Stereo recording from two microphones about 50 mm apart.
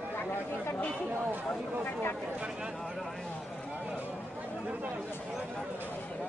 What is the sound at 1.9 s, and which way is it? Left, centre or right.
Speech, left.